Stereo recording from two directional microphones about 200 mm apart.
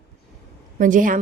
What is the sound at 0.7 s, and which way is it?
Speech, 40° right (ahead or behind).